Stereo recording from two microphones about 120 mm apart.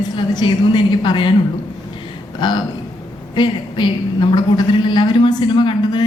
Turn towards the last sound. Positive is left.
turn(degrees=40)  # may be behind; listen again after turning